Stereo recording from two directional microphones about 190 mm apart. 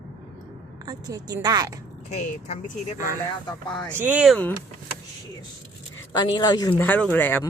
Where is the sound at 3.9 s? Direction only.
10° right (ahead or behind).